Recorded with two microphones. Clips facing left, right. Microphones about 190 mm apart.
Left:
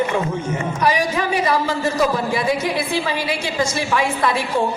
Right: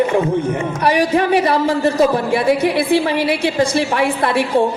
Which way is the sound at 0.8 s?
60° right (ahead or behind).